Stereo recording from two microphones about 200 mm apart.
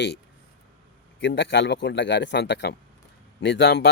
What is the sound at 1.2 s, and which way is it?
Speech, 65° left (ahead or behind).